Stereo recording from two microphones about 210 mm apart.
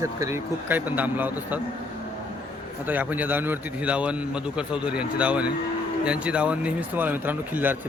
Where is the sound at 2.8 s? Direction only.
10° right (ahead or behind).